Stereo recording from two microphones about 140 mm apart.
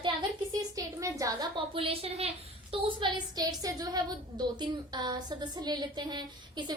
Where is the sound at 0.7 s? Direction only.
25° right (ahead or behind).